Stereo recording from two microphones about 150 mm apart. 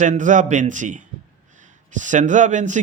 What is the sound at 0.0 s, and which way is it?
Speech, 55° right (ahead or behind).